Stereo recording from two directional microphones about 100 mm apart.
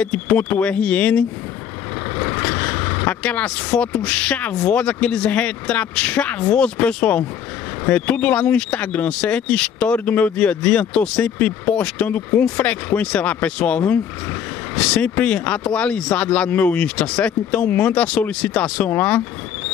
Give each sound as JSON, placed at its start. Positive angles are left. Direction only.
{"t": 0.0, "sound": "speech", "side_deg": 15}